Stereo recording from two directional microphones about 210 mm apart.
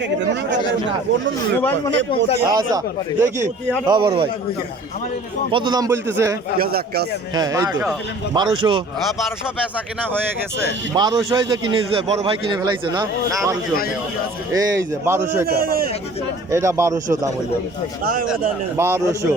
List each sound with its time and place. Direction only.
1.5 s speech: 10° left (ahead or behind)
2.4 s a man's voice: 15° right (ahead or behind)
5.5 s speech: 25° right (ahead or behind)
6.6 s speech: 45° right (ahead or behind)
7.3 s a man's voice: 15° right (ahead or behind)
10.9 s a man's voice: 20° right (ahead or behind)
14.5 s speech: 15° right (ahead or behind)
15.4 s speech: 45° right (ahead or behind)
16.5 s speech: 15° right (ahead or behind)
18.0 s speech: 45° right (ahead or behind)
18.8 s speech: 15° right (ahead or behind)